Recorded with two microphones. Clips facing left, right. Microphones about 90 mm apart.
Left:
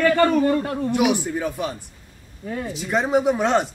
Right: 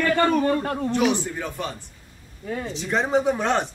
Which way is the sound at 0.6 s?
Centre (ahead or behind).